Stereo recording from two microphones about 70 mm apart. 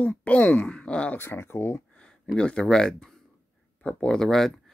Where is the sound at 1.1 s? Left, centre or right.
Left.